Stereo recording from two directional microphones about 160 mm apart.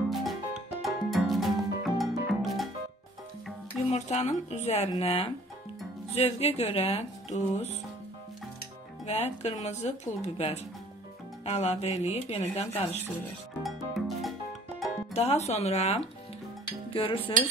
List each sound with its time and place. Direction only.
0.1 s music: centre (ahead or behind)
3.8 s speech: 45° left (ahead or behind)
9.0 s speech: 45° left (ahead or behind)
13.6 s music: centre (ahead or behind)
15.1 s speech: 40° left (ahead or behind)